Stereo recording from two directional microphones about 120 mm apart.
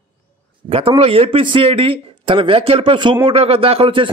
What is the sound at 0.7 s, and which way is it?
A man's voice, 50° right (ahead or behind).